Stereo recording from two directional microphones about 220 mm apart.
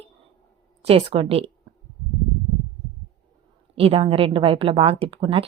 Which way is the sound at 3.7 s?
25° right (ahead or behind).